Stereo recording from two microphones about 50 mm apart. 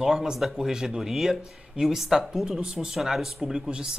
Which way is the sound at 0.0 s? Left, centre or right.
Centre.